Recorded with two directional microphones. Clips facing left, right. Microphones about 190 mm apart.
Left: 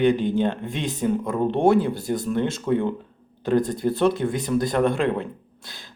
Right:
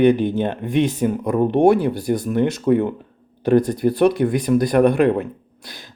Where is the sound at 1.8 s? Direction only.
20° left (ahead or behind).